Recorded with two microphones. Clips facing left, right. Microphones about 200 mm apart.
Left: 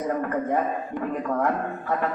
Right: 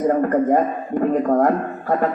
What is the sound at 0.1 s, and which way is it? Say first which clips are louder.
A man's voice: right 6 dB; 45° right (ahead or behind).